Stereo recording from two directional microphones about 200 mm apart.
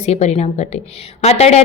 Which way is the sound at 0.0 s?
35° left (ahead or behind).